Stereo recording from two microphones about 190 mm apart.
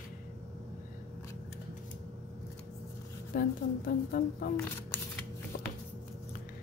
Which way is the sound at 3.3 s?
50° left (ahead or behind).